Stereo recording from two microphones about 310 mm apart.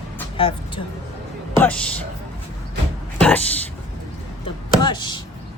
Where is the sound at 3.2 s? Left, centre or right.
Centre.